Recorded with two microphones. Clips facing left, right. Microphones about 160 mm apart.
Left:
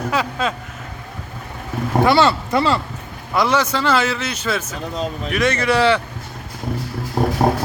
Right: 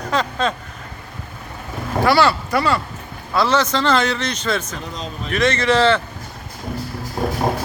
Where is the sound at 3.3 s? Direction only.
15° left (ahead or behind).